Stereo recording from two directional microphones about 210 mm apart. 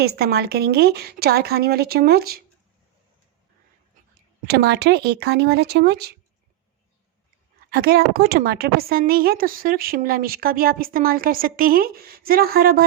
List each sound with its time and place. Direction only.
0.0 s a woman's voice: 50° right (ahead or behind)
4.4 s a woman's voice: 50° right (ahead or behind)
7.7 s a woman's voice: 50° right (ahead or behind)